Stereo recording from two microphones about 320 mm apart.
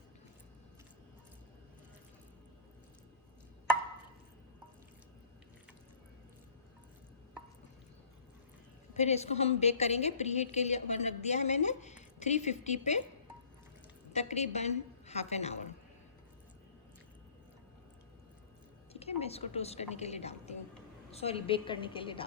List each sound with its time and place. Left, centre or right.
8.9 s a woman's voice: left
14.1 s a woman's voice: left
18.9 s a woman's voice: centre